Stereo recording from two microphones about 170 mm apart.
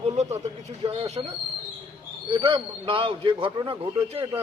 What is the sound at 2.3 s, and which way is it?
A man's voice, 30° right (ahead or behind).